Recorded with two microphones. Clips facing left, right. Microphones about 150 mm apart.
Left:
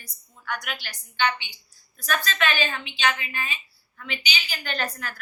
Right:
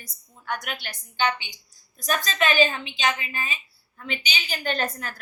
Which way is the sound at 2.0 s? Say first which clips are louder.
Right 1 dB; 40° right (ahead or behind).